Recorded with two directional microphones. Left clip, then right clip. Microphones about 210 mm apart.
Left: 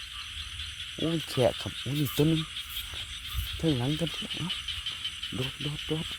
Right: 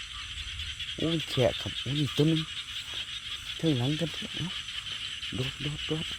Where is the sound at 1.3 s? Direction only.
10° left (ahead or behind).